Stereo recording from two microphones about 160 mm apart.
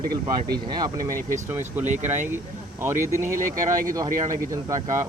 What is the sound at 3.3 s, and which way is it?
Speech, 20° right (ahead or behind).